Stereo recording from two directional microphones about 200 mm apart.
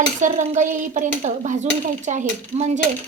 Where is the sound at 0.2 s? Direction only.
40° right (ahead or behind).